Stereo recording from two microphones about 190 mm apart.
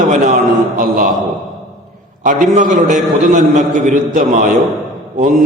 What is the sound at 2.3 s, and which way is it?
A man's voice, 40° right (ahead or behind).